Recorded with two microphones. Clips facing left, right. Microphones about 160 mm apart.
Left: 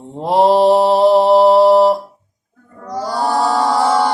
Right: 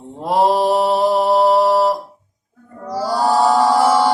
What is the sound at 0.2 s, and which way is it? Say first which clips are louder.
Mantra: left 4 dB; 30° left (ahead or behind).